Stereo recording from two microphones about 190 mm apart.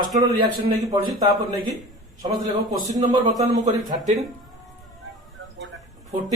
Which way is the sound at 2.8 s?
35° right (ahead or behind).